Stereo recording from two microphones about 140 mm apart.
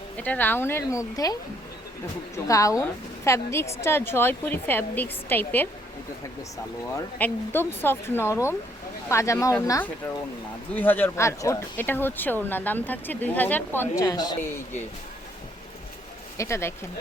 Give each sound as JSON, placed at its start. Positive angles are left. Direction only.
{"t": 0.2, "sound": "speech", "side_deg": 10}
{"t": 7.2, "sound": "speech", "side_deg": 15}
{"t": 10.8, "sound": "speech", "side_deg": 15}
{"t": 13.9, "sound": "speech", "side_deg": 25}
{"t": 16.4, "sound": "speech", "side_deg": 20}